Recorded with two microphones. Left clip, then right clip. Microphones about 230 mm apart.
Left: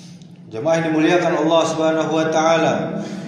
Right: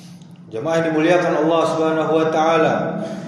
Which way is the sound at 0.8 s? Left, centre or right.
Centre.